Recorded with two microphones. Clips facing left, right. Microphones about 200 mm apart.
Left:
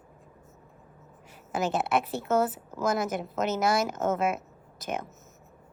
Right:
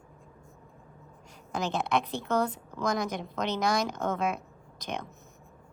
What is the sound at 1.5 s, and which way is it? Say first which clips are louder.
A woman's voice: left 2 dB; 5° left (ahead or behind).